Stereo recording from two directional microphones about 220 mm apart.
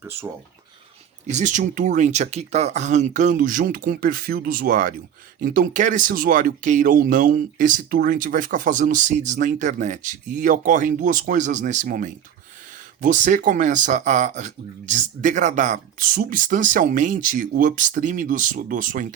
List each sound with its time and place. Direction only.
0.0 s speech: 10° right (ahead or behind)
1.3 s speech: 35° right (ahead or behind)